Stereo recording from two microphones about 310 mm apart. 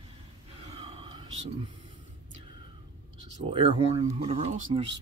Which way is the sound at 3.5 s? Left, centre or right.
Centre.